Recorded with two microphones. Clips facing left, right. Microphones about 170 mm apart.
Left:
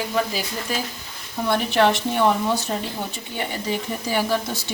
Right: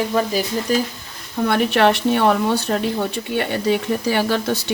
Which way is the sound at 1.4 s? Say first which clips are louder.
Right 3 dB; 60° right (ahead or behind).